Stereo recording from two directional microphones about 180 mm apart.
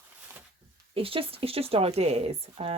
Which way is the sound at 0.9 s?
30° right (ahead or behind).